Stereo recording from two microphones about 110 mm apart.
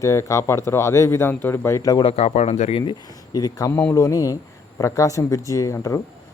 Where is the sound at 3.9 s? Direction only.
30° left (ahead or behind).